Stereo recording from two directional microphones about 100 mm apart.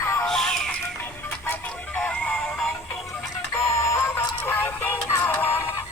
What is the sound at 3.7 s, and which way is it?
Music, 25° left (ahead or behind).